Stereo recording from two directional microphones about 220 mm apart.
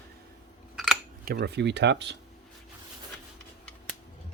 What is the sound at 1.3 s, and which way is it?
Speech, 50° right (ahead or behind).